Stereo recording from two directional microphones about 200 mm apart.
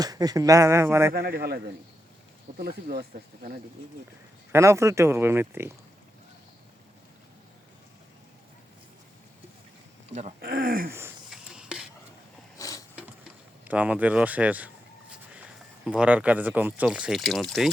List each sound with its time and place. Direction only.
0.0 s speech: 20° right (ahead or behind)
1.1 s speech: 50° right (ahead or behind)
4.5 s speech: 15° right (ahead or behind)
10.1 s speech: 35° right (ahead or behind)
10.4 s speech: 50° right (ahead or behind)
11.3 s a sound: 5° right (ahead or behind)
12.5 s a sound: 15° left (ahead or behind)
13.7 s speech: 5° right (ahead or behind)